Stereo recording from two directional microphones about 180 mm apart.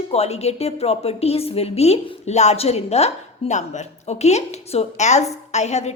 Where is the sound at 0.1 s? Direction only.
35° left (ahead or behind).